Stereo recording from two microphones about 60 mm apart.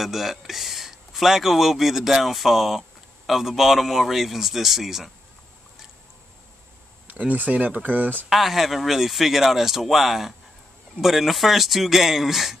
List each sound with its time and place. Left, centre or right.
0.0 s speech: centre
7.1 s speech: right
8.3 s speech: centre